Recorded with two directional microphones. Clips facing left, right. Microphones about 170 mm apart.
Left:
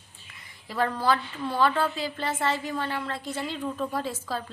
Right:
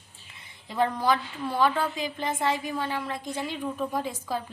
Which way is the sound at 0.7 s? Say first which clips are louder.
Right 1 dB; 15° right (ahead or behind).